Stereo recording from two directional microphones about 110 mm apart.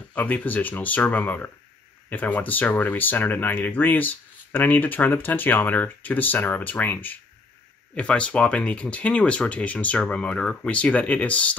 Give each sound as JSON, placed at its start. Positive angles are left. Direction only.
{"t": 0.1, "sound": "speech", "side_deg": 15}